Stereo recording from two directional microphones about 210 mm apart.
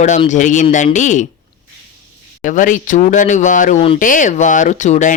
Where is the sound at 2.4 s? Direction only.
40° left (ahead or behind).